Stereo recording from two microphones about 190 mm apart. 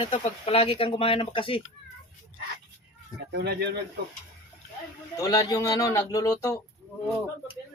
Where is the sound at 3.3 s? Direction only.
60° right (ahead or behind).